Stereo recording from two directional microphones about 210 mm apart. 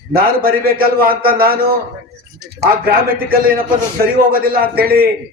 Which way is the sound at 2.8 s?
45° right (ahead or behind).